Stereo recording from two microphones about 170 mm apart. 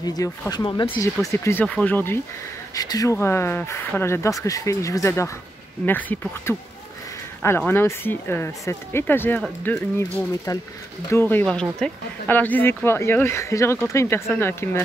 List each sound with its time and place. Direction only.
0.0 s speech: 25° left (ahead or behind); by 9.8 s 5° left (ahead or behind)
10.5 s speech: 20° left (ahead or behind)